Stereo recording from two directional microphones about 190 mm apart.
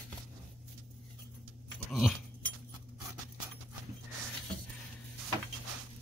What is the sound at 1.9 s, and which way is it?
Dog, centre (ahead or behind).